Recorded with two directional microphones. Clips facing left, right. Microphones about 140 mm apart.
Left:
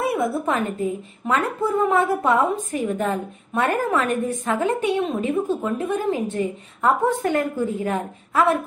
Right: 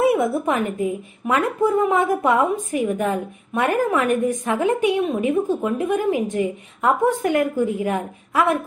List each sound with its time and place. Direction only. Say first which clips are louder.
0.1 s a woman's voice: right 3 dB; 20° right (ahead or behind)